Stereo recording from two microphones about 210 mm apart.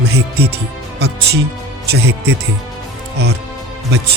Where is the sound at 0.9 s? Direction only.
50° right (ahead or behind).